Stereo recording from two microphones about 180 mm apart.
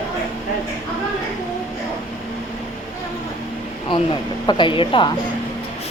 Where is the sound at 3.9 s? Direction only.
25° left (ahead or behind).